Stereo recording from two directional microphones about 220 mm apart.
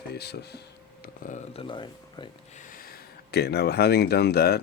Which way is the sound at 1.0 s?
35° left (ahead or behind).